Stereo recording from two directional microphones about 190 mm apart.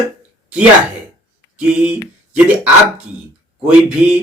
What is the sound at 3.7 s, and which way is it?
Speech, 5° right (ahead or behind).